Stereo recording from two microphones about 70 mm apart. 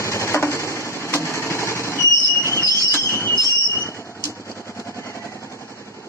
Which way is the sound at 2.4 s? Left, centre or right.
Left.